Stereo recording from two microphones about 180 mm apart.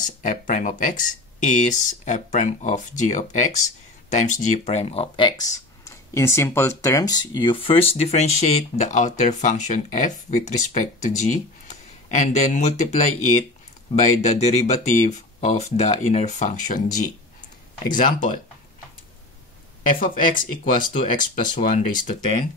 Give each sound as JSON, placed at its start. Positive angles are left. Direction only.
{"t": 0.0, "sound": "speech", "side_deg": 45}
{"t": 17.9, "sound": "speech", "side_deg": 45}
{"t": 20.7, "sound": "speech", "side_deg": 30}
{"t": 21.1, "sound": "speech", "side_deg": 45}